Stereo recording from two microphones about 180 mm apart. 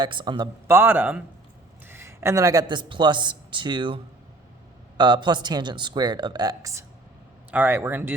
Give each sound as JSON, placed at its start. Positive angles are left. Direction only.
{"t": 0.0, "sound": "speech", "side_deg": -25}
{"t": 0.7, "sound": "speech", "side_deg": -10}